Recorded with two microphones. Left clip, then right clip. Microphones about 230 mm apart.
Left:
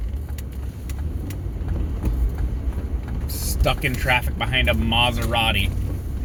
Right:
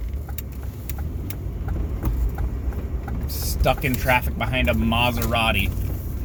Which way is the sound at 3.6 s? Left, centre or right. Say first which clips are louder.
Right 1 dB; centre.